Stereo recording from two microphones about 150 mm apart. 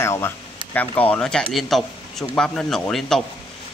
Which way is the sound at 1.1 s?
5° left (ahead or behind).